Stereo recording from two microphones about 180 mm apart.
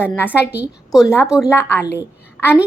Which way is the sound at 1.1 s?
15° left (ahead or behind).